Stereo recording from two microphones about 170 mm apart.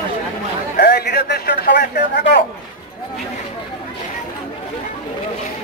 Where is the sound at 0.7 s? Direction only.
70° left (ahead or behind).